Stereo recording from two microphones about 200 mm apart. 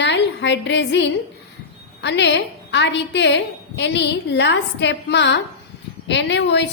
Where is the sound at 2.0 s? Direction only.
60° left (ahead or behind).